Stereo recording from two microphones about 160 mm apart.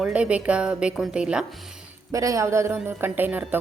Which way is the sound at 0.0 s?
5° right (ahead or behind).